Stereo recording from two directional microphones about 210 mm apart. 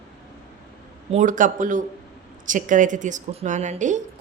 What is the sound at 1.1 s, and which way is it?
Speech, 40° right (ahead or behind).